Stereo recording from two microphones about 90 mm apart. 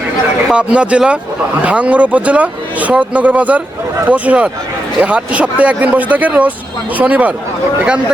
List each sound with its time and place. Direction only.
0.4 s speech: 10° right (ahead or behind)